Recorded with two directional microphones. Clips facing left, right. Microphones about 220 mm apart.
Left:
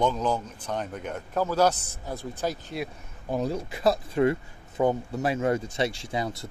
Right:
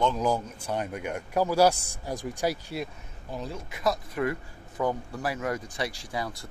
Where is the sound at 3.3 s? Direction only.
40° left (ahead or behind).